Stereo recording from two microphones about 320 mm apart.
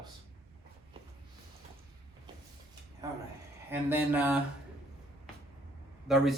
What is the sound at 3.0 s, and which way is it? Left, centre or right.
Speech, centre.